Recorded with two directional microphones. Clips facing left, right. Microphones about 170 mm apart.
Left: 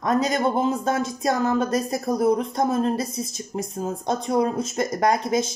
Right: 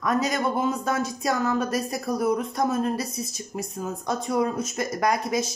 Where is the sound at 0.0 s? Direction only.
30° left (ahead or behind).